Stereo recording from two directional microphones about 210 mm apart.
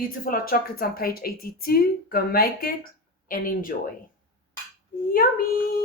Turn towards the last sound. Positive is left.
turn(degrees=45)  # may be behind; listen again after turning